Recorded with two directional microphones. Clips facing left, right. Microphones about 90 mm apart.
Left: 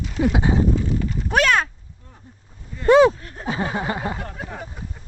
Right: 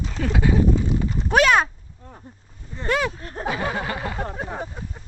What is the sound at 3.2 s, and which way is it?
Speech, 35° right (ahead or behind).